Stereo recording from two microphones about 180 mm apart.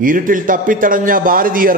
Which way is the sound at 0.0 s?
50° right (ahead or behind).